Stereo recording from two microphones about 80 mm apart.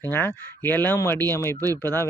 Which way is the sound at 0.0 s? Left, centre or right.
Left.